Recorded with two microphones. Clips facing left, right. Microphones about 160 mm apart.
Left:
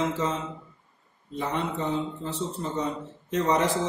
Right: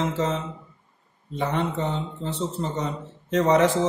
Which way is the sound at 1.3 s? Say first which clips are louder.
Right 3 dB; 75° right (ahead or behind).